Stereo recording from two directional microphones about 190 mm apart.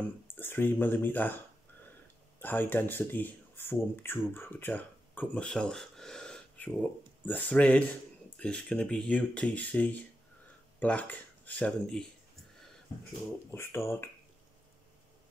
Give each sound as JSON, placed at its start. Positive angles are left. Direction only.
{"t": 0.4, "sound": "speech", "side_deg": 10}
{"t": 2.4, "sound": "speech", "side_deg": 10}
{"t": 13.5, "sound": "speech", "side_deg": 15}